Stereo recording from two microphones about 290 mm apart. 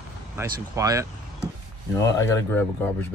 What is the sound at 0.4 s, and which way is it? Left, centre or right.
Speech, centre.